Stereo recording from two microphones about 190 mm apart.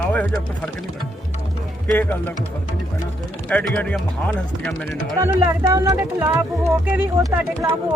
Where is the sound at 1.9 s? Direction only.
10° left (ahead or behind).